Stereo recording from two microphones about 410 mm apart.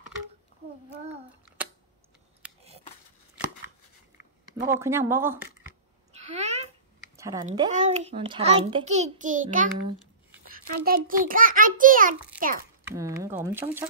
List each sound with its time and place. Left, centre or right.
4.6 s speech: centre
6.1 s a sound: centre
7.2 s a child's voice: centre
12.9 s speech: centre